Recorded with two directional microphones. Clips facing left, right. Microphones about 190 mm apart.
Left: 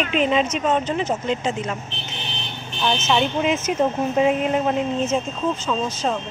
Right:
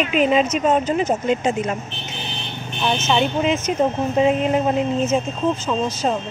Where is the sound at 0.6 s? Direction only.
40° right (ahead or behind).